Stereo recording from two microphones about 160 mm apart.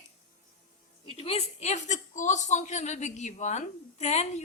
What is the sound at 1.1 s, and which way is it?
A woman's voice, 40° left (ahead or behind).